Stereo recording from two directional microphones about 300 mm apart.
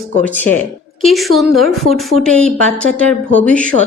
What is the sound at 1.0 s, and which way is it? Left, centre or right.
A woman's voice, centre.